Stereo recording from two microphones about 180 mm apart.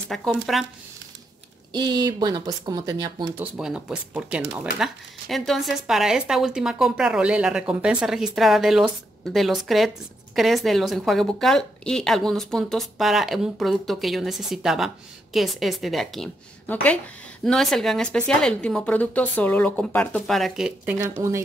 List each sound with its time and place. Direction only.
0.1 s a woman's voice: centre (ahead or behind)
1.7 s speech: 20° right (ahead or behind)
3.3 s a woman's voice: 5° right (ahead or behind)